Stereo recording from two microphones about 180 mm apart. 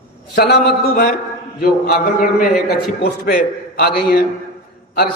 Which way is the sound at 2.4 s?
60° left (ahead or behind).